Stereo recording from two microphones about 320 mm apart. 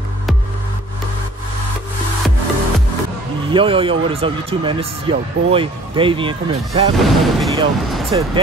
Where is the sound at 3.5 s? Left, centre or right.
Centre.